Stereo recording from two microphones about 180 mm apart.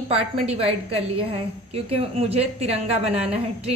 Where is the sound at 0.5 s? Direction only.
35° right (ahead or behind).